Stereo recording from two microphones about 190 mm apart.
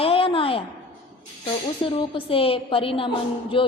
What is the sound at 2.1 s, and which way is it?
A woman's voice, 30° left (ahead or behind).